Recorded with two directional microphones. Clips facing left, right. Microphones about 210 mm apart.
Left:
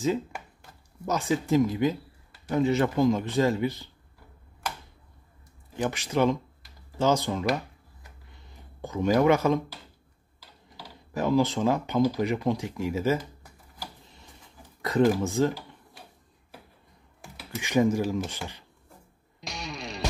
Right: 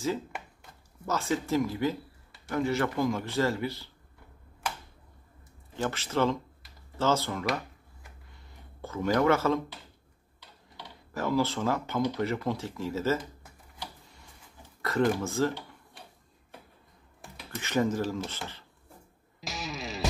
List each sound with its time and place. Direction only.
1.0 s a man's voice: 15° left (ahead or behind)
5.8 s speech: 15° left (ahead or behind)
8.8 s speech: 15° left (ahead or behind)
11.1 s speech: 15° left (ahead or behind)
13.2 s computer keyboard: centre (ahead or behind)
14.6 s a sound: 15° left (ahead or behind)
15.2 s speech: 15° left (ahead or behind)
17.6 s speech: 15° left (ahead or behind)
19.4 s music: centre (ahead or behind)